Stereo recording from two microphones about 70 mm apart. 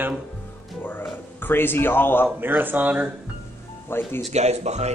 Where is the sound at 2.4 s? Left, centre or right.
Right.